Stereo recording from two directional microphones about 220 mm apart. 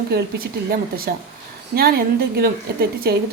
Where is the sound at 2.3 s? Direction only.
45° right (ahead or behind).